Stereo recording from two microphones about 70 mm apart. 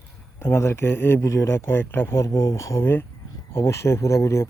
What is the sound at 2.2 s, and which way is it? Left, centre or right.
Speech, left.